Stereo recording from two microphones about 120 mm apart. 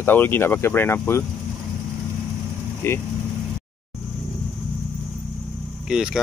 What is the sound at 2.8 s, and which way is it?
Speech, 20° left (ahead or behind).